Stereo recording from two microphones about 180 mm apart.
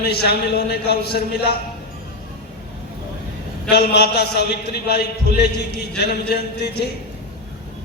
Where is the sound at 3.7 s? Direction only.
65° left (ahead or behind).